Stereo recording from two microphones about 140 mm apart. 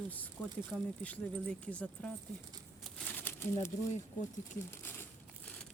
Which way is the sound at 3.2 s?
15° left (ahead or behind).